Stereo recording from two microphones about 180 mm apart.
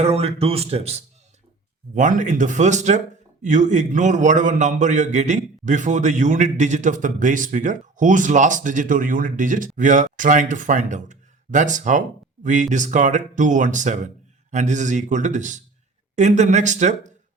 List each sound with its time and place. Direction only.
0.0 s speech: 35° right (ahead or behind)
2.0 s a man's voice: 45° right (ahead or behind)